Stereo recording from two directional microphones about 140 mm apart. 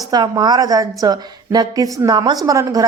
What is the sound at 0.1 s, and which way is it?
A woman's voice, 30° right (ahead or behind).